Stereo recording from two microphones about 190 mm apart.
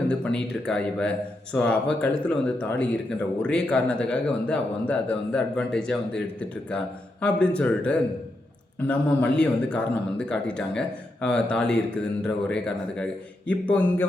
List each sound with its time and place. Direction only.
0.1 s speech: 5° left (ahead or behind)